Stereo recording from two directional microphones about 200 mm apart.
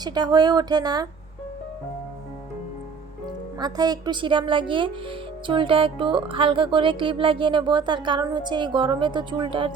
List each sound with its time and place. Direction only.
0.0 s speech: 20° right (ahead or behind)
3.6 s speech: 20° right (ahead or behind)